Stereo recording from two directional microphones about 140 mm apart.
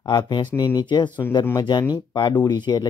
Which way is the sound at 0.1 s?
30° left (ahead or behind).